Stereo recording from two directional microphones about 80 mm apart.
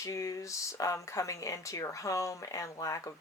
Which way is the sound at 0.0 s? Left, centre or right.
Left.